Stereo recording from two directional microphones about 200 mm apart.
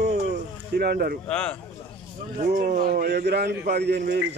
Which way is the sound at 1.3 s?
5° left (ahead or behind).